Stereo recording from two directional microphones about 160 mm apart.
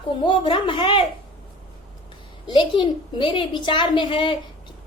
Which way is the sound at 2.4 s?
30° left (ahead or behind).